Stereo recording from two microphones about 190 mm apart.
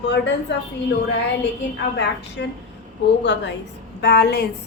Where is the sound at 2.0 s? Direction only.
65° left (ahead or behind).